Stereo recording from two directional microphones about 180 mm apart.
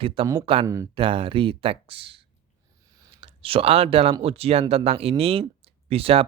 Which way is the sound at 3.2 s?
30° right (ahead or behind).